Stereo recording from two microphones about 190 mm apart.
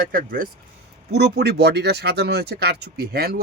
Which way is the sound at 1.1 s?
60° right (ahead or behind).